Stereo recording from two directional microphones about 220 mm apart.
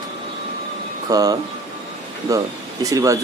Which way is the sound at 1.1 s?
15° right (ahead or behind).